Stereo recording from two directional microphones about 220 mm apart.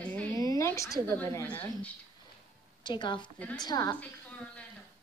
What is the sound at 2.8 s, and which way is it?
A woman's voice, 20° left (ahead or behind).